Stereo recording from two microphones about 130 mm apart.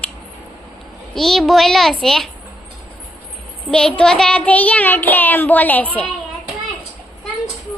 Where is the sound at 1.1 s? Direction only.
Centre (ahead or behind).